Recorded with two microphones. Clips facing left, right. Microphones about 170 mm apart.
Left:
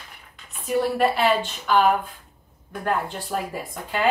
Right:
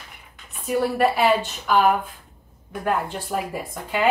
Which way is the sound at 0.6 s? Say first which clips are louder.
Right 1 dB; 5° right (ahead or behind).